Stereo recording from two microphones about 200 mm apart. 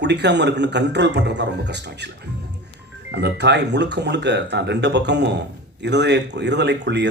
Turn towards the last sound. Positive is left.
turn(degrees=-60)  # may be behind; listen again after turning